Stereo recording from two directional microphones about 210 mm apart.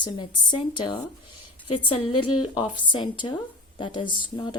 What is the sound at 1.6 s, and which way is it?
Speech, 90° left.